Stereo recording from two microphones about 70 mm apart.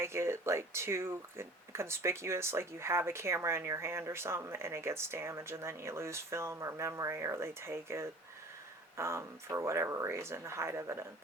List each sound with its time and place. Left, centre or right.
0.0 s speech: right